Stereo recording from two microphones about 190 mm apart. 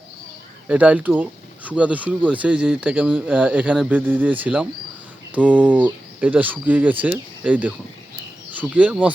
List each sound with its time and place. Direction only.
0.7 s speech: 5° right (ahead or behind)
8.7 s speech: 5° right (ahead or behind)